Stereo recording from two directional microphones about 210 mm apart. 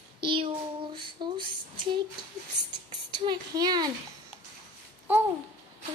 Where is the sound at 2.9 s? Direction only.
25° right (ahead or behind).